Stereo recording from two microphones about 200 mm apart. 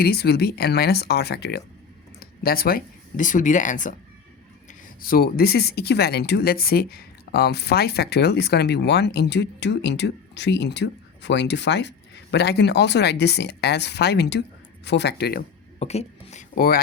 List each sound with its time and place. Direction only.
0.0 s speech: 50° left (ahead or behind)
5.0 s speech: 50° left (ahead or behind)
15.8 s speech: 30° left (ahead or behind)
16.6 s speech: 50° left (ahead or behind)